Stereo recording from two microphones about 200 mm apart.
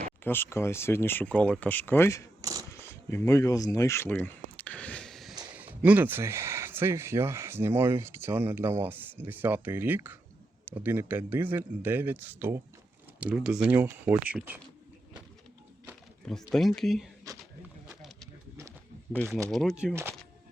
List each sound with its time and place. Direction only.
0.3 s speech: 10° left (ahead or behind)
2.4 s a sound: 20° right (ahead or behind)
2.7 s a sound: 15° left (ahead or behind)
5.8 s speech: 10° right (ahead or behind)
16.5 s speech: centre (ahead or behind)
17.8 s snake: centre (ahead or behind)
19.2 s speech: 10° right (ahead or behind)
19.5 s speech: centre (ahead or behind)